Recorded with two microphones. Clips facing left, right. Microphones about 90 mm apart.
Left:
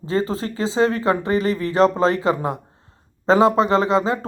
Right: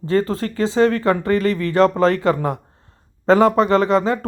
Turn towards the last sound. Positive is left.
turn(degrees=25)  # may be behind; listen again after turning